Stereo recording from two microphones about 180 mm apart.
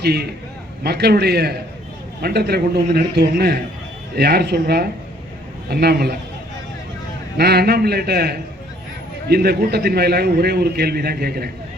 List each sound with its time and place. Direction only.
0.0 s a man's voice: 65° right (ahead or behind)
7.3 s a man's voice: 65° right (ahead or behind)